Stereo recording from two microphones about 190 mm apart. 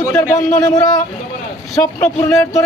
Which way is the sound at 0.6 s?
20° left (ahead or behind).